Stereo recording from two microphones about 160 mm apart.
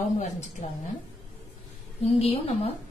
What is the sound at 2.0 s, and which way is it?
Speech, 40° left (ahead or behind).